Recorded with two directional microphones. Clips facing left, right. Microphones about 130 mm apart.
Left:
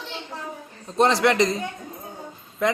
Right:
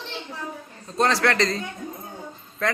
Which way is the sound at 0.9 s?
20° left (ahead or behind).